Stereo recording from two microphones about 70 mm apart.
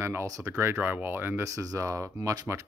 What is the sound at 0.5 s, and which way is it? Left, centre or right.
Speech, right.